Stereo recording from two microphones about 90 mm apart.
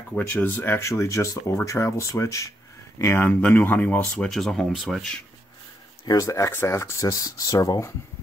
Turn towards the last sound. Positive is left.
turn(degrees=35)  # may be behind; listen again after turning